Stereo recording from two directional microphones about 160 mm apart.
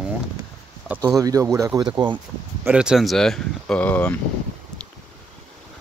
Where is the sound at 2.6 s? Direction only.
5° right (ahead or behind); by 4.2 s 10° left (ahead or behind).